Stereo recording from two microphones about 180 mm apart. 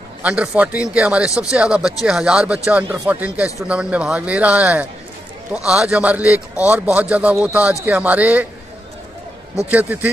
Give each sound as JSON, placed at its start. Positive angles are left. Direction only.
{"t": 0.2, "sound": "speech", "side_deg": -10}
{"t": 9.7, "sound": "speech", "side_deg": -10}